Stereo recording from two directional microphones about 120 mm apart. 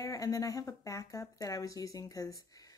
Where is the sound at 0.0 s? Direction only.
30° left (ahead or behind).